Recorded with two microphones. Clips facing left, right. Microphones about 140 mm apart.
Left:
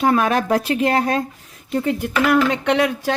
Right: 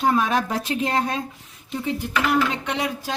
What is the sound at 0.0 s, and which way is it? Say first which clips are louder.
Speech: left 3 dB; 65° left (ahead or behind).